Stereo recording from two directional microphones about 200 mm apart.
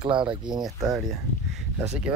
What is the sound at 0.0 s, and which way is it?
Speech, 25° right (ahead or behind).